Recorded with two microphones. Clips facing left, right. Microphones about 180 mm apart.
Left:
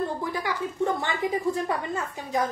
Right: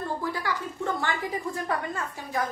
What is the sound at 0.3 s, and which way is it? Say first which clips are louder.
A woman's voice: left 2 dB; 20° left (ahead or behind).